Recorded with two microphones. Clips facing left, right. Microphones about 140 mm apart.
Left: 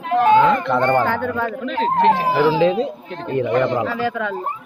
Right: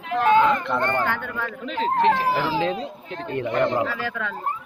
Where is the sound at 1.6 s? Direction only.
65° left (ahead or behind).